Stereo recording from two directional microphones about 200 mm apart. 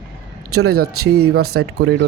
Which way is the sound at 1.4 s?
80° right.